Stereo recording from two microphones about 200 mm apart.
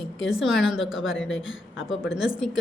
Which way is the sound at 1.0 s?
70° left (ahead or behind).